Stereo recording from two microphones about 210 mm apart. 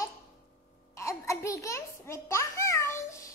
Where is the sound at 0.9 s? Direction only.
15° left (ahead or behind).